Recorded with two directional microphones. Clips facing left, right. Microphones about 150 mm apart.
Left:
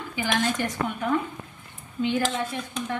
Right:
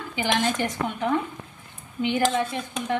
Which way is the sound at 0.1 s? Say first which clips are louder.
Right 2 dB; 20° right (ahead or behind).